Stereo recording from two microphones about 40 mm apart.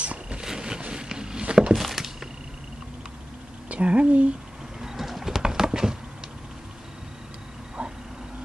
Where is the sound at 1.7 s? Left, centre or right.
Centre.